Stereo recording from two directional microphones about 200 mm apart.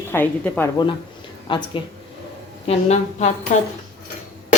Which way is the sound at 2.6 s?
35° left (ahead or behind).